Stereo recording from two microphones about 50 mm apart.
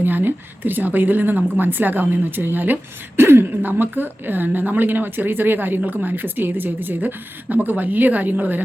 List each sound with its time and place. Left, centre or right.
0.0 s a woman's voice: right
3.2 s a woman's voice: right